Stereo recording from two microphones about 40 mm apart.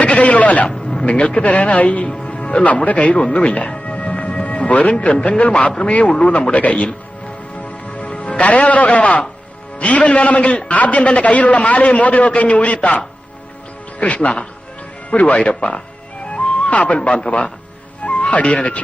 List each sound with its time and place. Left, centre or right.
0.0 s music: left
0.9 s a man's voice: left
2.2 s music: left
2.8 s a man's voice: left
3.2 s a man's voice: left
3.4 s a man's voice: left
3.8 s music: left
5.4 s a man's voice: left
6.5 s a man's voice: left
14.0 s a man's voice: left
16.3 s music: left
17.1 s a man's voice: centre
18.0 s music: left